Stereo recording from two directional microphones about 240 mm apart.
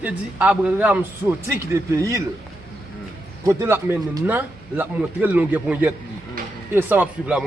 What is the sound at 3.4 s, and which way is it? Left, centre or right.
A man's voice, centre.